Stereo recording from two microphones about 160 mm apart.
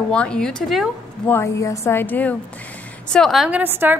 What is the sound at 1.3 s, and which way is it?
A woman's voice, 20° left (ahead or behind).